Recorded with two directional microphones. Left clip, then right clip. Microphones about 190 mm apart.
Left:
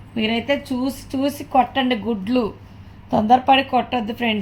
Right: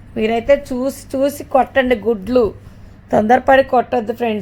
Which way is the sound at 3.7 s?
30° right (ahead or behind).